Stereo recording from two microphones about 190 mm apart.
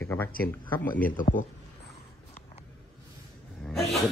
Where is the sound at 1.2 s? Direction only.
40° left (ahead or behind).